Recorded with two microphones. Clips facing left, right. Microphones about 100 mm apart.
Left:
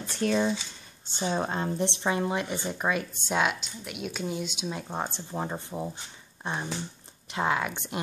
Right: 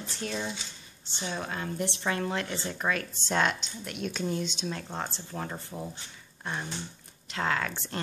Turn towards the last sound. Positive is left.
turn(degrees=15)  # may be behind; listen again after turning